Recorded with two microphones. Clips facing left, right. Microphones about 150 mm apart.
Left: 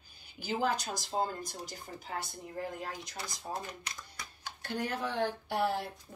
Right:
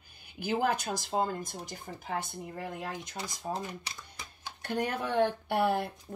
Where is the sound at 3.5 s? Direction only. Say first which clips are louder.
Right 4 dB; 25° right (ahead or behind).